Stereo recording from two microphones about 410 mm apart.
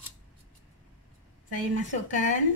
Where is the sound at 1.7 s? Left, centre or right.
Centre.